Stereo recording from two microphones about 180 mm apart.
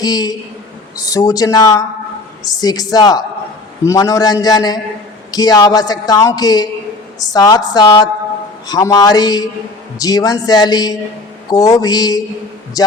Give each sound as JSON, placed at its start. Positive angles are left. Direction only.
{"t": 0.0, "sound": "a man's voice", "side_deg": 20}